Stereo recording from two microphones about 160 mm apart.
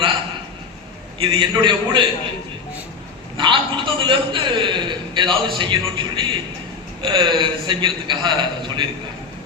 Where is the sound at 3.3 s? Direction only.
30° right (ahead or behind).